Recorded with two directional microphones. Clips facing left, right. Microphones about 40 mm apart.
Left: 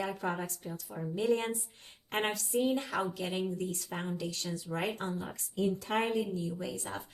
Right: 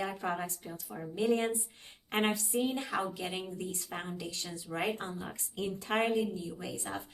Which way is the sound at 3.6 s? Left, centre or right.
Right.